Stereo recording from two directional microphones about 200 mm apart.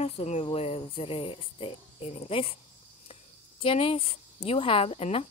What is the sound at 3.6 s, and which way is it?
Speech, 30° left (ahead or behind).